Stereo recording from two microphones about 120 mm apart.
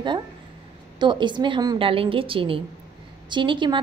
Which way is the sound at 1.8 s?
50° right (ahead or behind).